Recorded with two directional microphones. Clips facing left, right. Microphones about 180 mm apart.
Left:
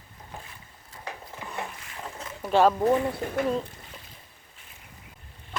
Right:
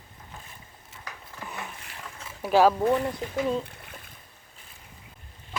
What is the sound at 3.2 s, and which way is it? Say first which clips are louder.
Speech: left 2 dB; 55° left (ahead or behind).